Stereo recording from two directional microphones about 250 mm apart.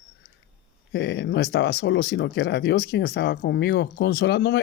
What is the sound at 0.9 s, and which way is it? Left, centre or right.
Speech, left.